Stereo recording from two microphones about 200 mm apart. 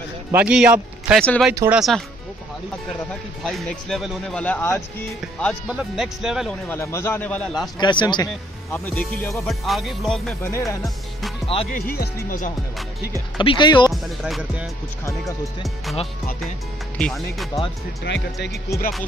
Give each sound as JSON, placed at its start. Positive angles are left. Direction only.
{"t": 0.3, "sound": "speech", "side_deg": -5}
{"t": 1.2, "sound": "speech", "side_deg": 5}
{"t": 1.5, "sound": "speech", "side_deg": -15}
{"t": 1.8, "sound": "speech", "side_deg": 0}
{"t": 3.4, "sound": "speech", "side_deg": 0}
{"t": 6.7, "sound": "speech", "side_deg": 15}
{"t": 7.8, "sound": "speech", "side_deg": 20}
{"t": 11.1, "sound": "music", "side_deg": 0}
{"t": 11.7, "sound": "speech", "side_deg": 50}
{"t": 13.4, "sound": "speech", "side_deg": 25}
{"t": 13.8, "sound": "speech", "side_deg": 0}
{"t": 17.0, "sound": "speech", "side_deg": 0}
{"t": 18.0, "sound": "speech", "side_deg": 60}